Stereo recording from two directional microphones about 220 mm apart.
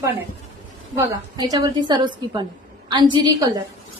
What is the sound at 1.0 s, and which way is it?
A woman's voice, 15° right (ahead or behind).